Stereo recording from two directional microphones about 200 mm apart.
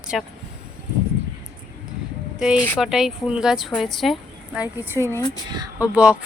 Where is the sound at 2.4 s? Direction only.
5° right (ahead or behind).